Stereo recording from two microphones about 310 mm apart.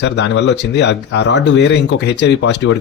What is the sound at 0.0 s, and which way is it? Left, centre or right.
Speech, left.